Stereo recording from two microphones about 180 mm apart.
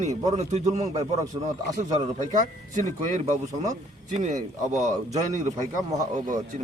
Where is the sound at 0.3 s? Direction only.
40° right (ahead or behind).